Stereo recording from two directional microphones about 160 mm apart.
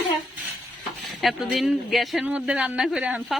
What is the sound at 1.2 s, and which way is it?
A man's voice, centre (ahead or behind).